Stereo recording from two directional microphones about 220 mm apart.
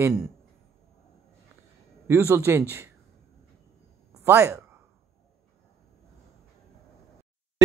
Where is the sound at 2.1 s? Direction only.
10° right (ahead or behind).